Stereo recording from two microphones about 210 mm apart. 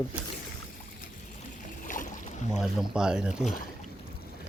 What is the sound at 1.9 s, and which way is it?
Boat, 35° left (ahead or behind).